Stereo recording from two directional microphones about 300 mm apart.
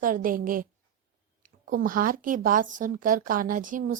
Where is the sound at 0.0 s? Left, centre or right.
Right.